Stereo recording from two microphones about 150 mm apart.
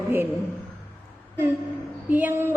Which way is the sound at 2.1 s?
15° right (ahead or behind).